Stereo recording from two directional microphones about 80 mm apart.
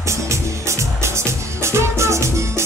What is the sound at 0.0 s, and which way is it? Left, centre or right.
Music, right.